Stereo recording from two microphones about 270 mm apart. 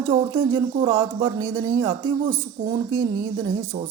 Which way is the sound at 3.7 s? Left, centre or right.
Centre.